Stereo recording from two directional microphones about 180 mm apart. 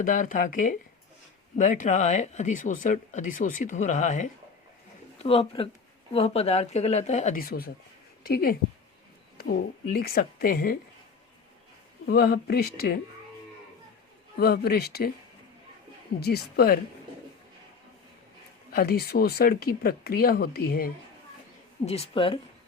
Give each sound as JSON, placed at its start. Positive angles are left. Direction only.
{"t": 0.0, "sound": "speech", "side_deg": 50}
{"t": 12.0, "sound": "speech", "side_deg": 60}
{"t": 14.3, "sound": "speech", "side_deg": 60}
{"t": 16.2, "sound": "speech", "side_deg": 60}
{"t": 18.7, "sound": "speech", "side_deg": 55}
{"t": 21.8, "sound": "speech", "side_deg": 35}